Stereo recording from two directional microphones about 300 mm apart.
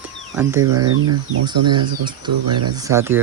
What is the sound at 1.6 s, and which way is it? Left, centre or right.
Speech, right.